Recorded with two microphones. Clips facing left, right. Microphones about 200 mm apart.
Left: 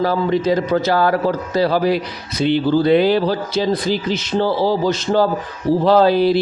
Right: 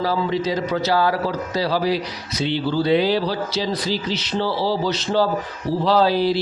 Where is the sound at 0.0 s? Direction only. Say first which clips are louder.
Left 4 dB; 55° left (ahead or behind).